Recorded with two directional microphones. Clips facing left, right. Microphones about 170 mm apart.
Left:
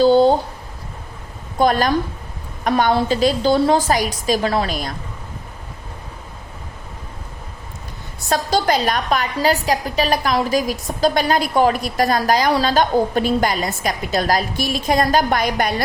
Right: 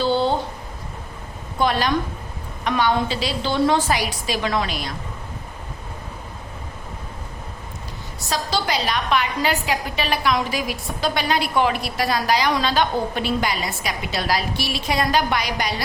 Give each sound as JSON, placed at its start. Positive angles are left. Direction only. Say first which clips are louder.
{"t": 0.0, "sound": "speech", "louder": "left 8 dB", "side_deg": 40}
{"t": 1.5, "sound": "a woman's voice", "louder": "left 4 dB", "side_deg": 45}
{"t": 8.3, "sound": "a woman's voice", "louder": "left 6 dB", "side_deg": 45}